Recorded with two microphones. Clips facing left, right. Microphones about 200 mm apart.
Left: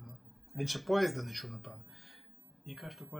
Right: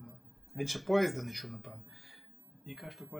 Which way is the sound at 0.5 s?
Centre (ahead or behind).